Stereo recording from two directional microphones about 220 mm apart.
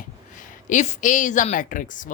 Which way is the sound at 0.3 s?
35° left (ahead or behind).